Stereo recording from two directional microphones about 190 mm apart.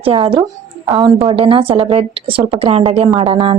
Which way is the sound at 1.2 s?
30° right (ahead or behind).